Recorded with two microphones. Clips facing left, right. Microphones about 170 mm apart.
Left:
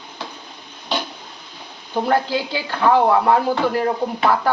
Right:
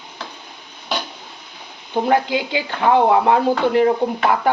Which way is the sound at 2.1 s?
15° right (ahead or behind).